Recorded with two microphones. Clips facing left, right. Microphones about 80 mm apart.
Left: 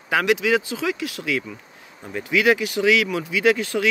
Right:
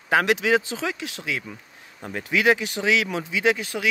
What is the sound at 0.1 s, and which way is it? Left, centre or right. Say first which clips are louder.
Speech: even; right.